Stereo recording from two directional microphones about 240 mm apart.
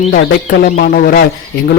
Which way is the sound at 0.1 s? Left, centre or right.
Left.